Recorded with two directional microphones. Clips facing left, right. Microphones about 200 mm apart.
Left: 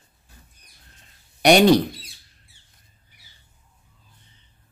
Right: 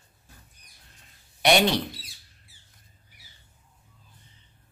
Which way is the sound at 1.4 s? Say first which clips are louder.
Left 7 dB; 45° left (ahead or behind).